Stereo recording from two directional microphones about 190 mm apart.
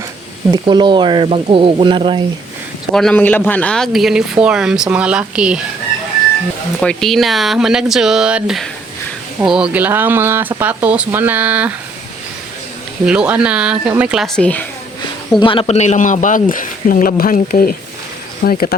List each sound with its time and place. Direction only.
0.5 s speech: 25° right (ahead or behind)
2.9 s speech: 5° left (ahead or behind)
6.7 s speech: centre (ahead or behind)
13.1 s speech: 5° right (ahead or behind)
15.4 s speech: 25° left (ahead or behind); by 18.8 s 50° left (ahead or behind)